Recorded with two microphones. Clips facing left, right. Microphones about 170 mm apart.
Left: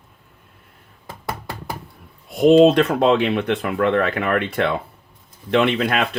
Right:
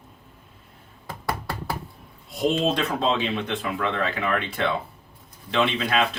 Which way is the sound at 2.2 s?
60° left (ahead or behind).